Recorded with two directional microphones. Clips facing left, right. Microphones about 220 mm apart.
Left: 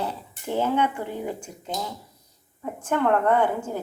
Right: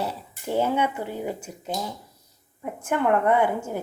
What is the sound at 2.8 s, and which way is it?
Speech, 10° right (ahead or behind).